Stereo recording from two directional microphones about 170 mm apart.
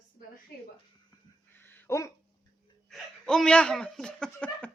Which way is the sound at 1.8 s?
15° left (ahead or behind).